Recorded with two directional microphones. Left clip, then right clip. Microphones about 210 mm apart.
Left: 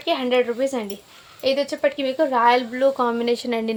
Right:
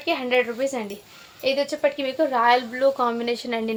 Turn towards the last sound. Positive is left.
turn(degrees=25)  # may be behind; listen again after turning